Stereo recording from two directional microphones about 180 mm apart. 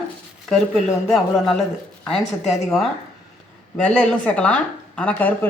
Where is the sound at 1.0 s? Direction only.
Centre (ahead or behind).